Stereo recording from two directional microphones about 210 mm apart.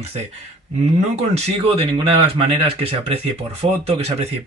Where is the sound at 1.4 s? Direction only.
25° right (ahead or behind).